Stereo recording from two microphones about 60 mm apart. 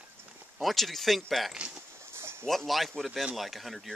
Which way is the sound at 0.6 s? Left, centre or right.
Centre.